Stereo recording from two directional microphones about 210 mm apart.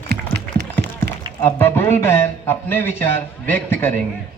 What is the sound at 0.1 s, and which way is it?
Run, 50° right (ahead or behind).